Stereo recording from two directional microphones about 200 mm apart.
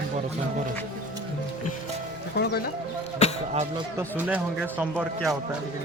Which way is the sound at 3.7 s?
10° right (ahead or behind).